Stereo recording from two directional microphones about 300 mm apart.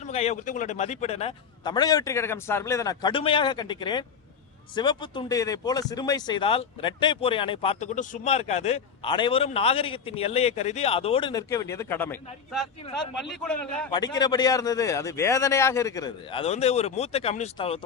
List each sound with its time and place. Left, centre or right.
0.1 s speech: left